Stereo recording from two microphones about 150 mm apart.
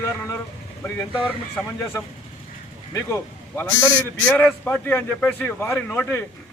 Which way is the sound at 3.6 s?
15° left (ahead or behind).